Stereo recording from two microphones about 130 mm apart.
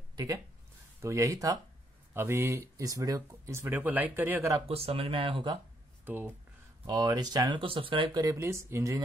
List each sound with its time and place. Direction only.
0.1 s a sound: 30° right (ahead or behind)
1.0 s speech: 25° right (ahead or behind)
4.6 s speech: 45° right (ahead or behind)
6.0 s speech: 15° right (ahead or behind)
6.9 s speech: 30° right (ahead or behind)